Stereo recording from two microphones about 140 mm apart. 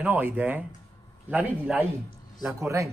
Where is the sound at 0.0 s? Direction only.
10° right (ahead or behind).